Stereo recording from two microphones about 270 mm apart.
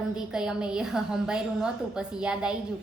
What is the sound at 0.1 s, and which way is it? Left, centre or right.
A woman's voice, centre.